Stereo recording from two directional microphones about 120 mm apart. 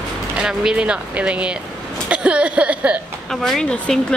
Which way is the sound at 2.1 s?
10° right (ahead or behind).